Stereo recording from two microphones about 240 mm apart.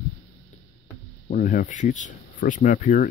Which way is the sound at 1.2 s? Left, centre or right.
Left.